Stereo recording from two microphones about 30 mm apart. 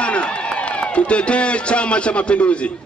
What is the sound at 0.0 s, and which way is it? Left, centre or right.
A man's voice, left.